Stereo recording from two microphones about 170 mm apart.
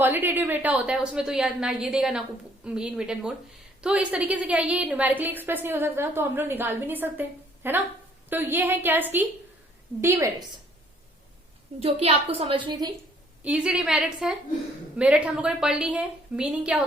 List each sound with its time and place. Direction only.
0.0 s a woman's voice: 10° right (ahead or behind)
11.8 s a woman's voice: 35° right (ahead or behind)
13.4 s a woman's voice: 5° right (ahead or behind)